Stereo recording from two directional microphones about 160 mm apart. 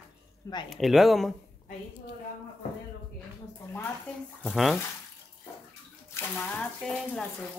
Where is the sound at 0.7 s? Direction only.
Centre (ahead or behind).